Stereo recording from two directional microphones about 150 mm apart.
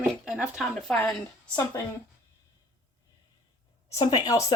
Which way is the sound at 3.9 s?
25° left (ahead or behind).